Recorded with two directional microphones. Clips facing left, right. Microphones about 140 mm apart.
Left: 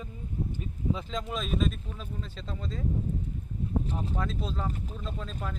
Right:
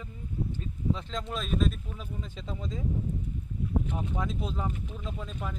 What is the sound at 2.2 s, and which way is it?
Speech, 15° right (ahead or behind).